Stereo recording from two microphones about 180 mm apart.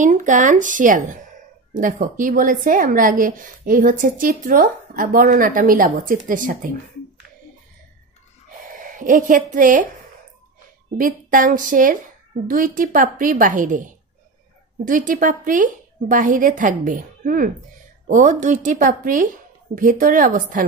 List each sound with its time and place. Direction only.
0.0 s a woman's voice: 45° right (ahead or behind)
8.8 s a woman's voice: 45° right (ahead or behind)
11.0 s a woman's voice: 50° right (ahead or behind)